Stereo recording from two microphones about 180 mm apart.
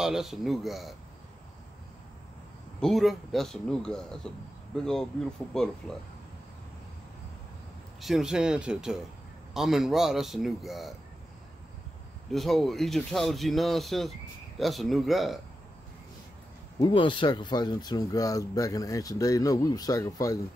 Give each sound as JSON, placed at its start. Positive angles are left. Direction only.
{"t": 0.0, "sound": "speech", "side_deg": 0}
{"t": 2.8, "sound": "speech", "side_deg": 0}
{"t": 8.0, "sound": "speech", "side_deg": 0}
{"t": 12.3, "sound": "speech", "side_deg": 0}
{"t": 16.8, "sound": "speech", "side_deg": 25}